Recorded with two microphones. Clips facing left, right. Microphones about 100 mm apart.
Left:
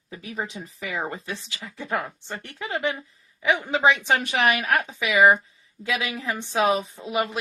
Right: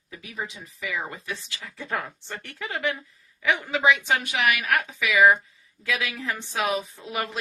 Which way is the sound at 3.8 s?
35° left (ahead or behind).